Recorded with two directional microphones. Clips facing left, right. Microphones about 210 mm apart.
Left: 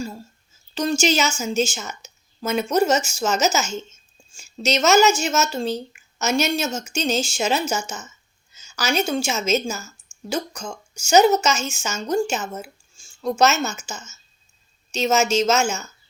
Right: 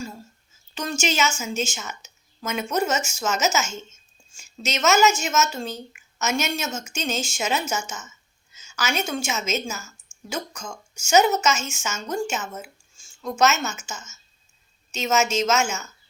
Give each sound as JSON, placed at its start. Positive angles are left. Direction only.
{"t": 0.7, "sound": "a woman's voice", "side_deg": 35}